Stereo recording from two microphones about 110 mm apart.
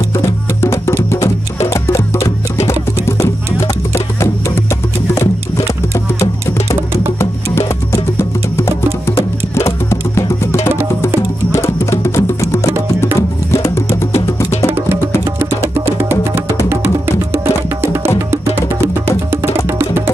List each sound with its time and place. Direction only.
0.2 s music: 25° left (ahead or behind)
7.2 s music: 25° left (ahead or behind)
15.3 s music: 20° right (ahead or behind)